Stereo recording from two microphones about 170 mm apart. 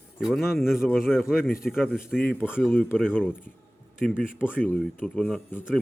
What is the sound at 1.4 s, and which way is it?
Speech, 60° left (ahead or behind).